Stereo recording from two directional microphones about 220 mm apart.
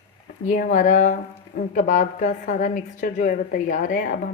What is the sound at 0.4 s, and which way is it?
Speech, 40° left (ahead or behind).